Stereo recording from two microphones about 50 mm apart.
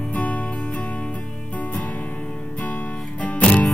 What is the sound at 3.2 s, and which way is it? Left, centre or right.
Music, left.